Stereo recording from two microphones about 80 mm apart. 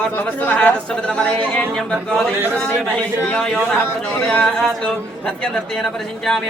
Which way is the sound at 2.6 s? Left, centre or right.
Centre.